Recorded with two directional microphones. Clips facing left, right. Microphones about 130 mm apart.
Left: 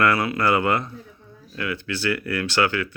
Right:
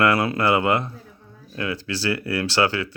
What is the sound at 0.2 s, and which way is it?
Speech, 30° right (ahead or behind).